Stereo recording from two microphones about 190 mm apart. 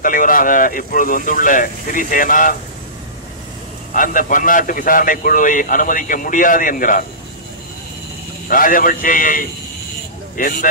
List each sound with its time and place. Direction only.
0.0 s a man's voice: 45° left (ahead or behind)
3.9 s a man's voice: 45° left (ahead or behind)
8.5 s a man's voice: 45° left (ahead or behind)